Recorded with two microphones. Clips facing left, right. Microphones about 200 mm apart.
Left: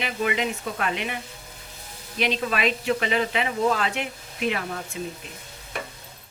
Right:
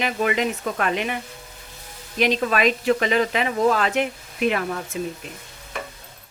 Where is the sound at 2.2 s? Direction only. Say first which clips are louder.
Right 5 dB; 45° right (ahead or behind).